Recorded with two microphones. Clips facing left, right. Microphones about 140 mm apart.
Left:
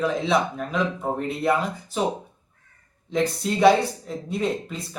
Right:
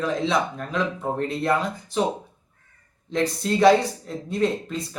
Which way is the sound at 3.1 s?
5° left (ahead or behind).